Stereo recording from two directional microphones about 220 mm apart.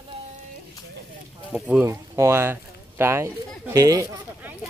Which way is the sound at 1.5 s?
5° right (ahead or behind).